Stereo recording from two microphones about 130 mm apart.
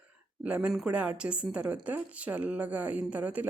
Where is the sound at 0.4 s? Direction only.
10° right (ahead or behind).